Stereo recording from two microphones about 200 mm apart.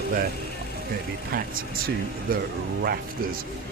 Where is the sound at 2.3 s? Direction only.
45° right (ahead or behind).